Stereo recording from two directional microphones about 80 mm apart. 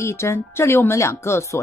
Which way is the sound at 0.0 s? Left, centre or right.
Left.